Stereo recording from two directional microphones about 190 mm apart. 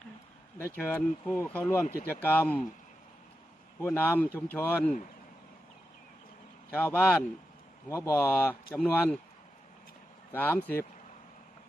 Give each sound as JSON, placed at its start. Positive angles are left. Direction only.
{"t": 0.6, "sound": "speech", "side_deg": 10}
{"t": 3.8, "sound": "speech", "side_deg": 10}
{"t": 6.7, "sound": "speech", "side_deg": 10}
{"t": 10.3, "sound": "speech", "side_deg": 10}